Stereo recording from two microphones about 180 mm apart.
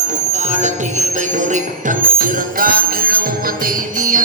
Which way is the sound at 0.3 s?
40° right (ahead or behind).